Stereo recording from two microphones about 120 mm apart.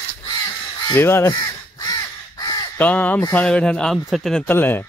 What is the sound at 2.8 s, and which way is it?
Speech, 15° left (ahead or behind).